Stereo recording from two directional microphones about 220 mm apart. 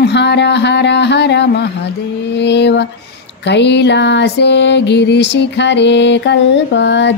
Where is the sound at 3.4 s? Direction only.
50° left (ahead or behind).